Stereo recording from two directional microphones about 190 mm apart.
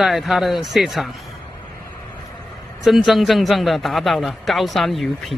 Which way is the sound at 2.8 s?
Centre (ahead or behind).